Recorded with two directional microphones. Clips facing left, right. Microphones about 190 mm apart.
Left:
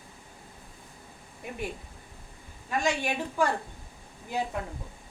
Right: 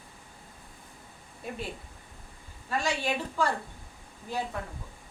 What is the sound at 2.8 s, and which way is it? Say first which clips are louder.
Speech: left 2 dB; 15° left (ahead or behind).